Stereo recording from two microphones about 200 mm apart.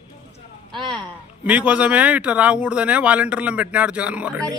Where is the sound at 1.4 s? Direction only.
5° right (ahead or behind).